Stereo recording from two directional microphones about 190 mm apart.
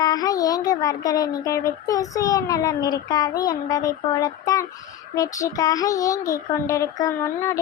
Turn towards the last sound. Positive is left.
turn(degrees=15)  # may be behind; listen again after turning